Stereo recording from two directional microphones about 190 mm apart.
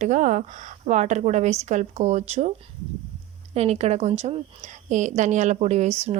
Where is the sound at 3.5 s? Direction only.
35° right (ahead or behind).